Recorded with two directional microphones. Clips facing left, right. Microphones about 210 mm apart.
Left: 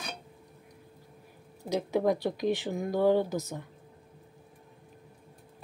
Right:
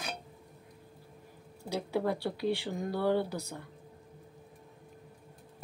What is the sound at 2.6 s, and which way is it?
Speech, 15° left (ahead or behind).